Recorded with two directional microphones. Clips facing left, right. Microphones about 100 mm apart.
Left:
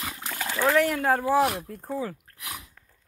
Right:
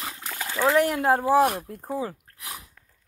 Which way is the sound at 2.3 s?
35° right (ahead or behind).